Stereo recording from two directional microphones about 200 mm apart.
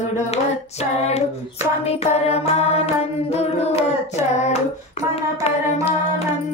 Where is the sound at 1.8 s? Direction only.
30° left (ahead or behind).